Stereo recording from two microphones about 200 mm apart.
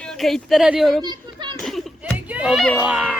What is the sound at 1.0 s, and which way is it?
Children playing, 20° right (ahead or behind).